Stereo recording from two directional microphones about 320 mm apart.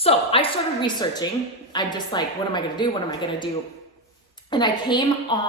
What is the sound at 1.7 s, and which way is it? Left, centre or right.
A woman's voice, centre.